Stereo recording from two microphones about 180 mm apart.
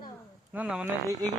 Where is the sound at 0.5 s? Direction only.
5° right (ahead or behind).